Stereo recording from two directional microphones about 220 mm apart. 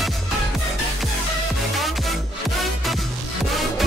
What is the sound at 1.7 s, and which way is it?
Music, centre (ahead or behind).